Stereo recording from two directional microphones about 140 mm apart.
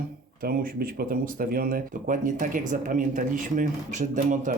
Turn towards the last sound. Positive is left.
turn(degrees=-65)  # may be behind; listen again after turning